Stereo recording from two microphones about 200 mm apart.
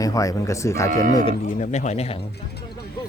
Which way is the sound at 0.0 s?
15° left (ahead or behind).